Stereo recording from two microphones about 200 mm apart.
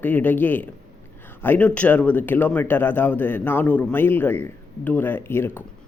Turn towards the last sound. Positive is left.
turn(degrees=10)  # may be behind; listen again after turning